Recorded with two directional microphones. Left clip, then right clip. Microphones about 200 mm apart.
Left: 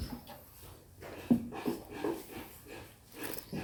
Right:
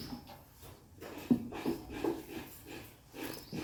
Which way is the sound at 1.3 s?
35° left (ahead or behind).